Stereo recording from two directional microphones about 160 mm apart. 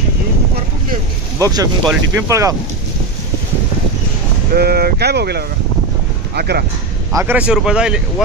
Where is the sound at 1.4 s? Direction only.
20° right (ahead or behind).